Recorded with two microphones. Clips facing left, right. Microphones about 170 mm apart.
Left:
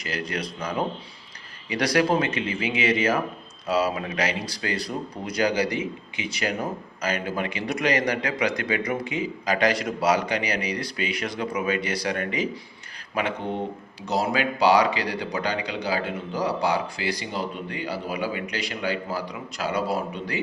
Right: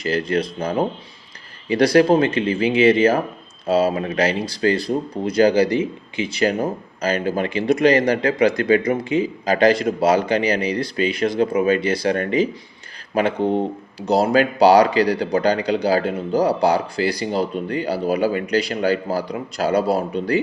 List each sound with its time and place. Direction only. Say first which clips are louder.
0.0 s a man's voice: right 9 dB; 30° right (ahead or behind)